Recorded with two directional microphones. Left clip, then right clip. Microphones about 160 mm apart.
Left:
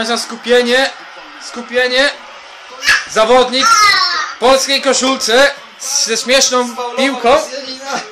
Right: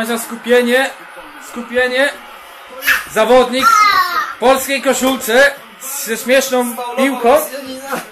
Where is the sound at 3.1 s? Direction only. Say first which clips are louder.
Even; 25° left (ahead or behind).